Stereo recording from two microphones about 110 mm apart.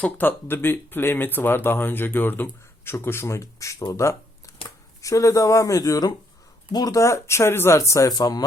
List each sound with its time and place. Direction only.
0.0 s speech: 15° left (ahead or behind)
3.9 s a sound: 30° left (ahead or behind)
5.0 s speech: 30° left (ahead or behind)